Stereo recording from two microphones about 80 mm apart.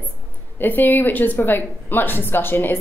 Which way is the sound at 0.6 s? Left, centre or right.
Left.